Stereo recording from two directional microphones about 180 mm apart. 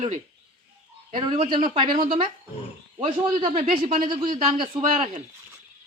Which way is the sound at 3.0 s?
40° right (ahead or behind).